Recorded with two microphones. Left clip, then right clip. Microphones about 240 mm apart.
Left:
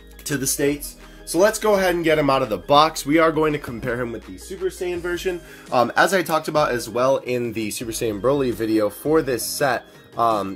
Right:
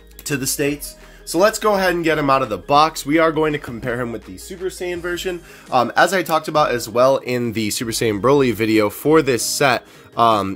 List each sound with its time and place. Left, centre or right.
0.3 s speech: right
4.7 s speech: right
5.7 s speech: centre; by 10.5 s right